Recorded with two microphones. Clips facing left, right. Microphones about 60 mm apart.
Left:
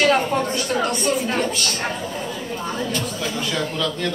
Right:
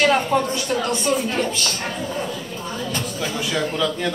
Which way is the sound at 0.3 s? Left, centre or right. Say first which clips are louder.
Right 2 dB; left.